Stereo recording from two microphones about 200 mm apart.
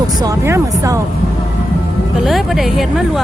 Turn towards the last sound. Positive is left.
turn(degrees=0)  # may be behind; listen again after turning